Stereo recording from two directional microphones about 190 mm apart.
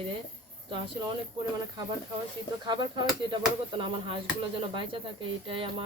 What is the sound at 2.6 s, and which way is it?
Speech, 25° right (ahead or behind).